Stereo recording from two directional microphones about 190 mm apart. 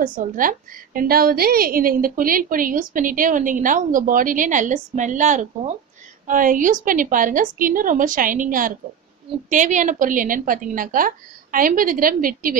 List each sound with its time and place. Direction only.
0.0 s a woman's voice: 45° right (ahead or behind)